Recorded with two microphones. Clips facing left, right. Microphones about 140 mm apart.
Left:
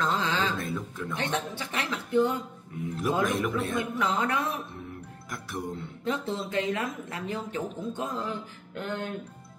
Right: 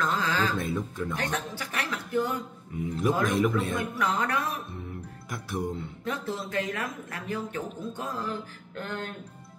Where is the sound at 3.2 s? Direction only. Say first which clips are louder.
Right 3 dB; centre (ahead or behind).